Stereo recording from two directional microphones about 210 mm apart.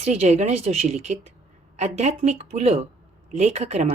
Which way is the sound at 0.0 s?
30° right (ahead or behind).